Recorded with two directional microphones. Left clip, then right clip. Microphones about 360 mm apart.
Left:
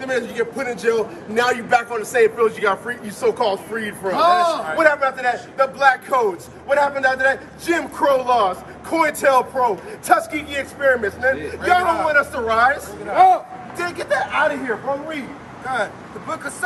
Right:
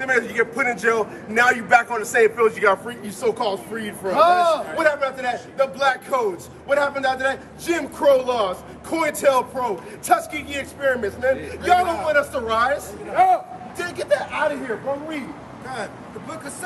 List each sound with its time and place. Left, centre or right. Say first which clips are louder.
0.0 s a man's voice: right 2 dB; centre
4.2 s speech: even; centre
4.7 s a man's voice: left 4 dB; centre
13.1 s speech: left 4 dB; left
13.7 s a man's voice: left 1 dB; centre
15.7 s speech: left 8 dB; centre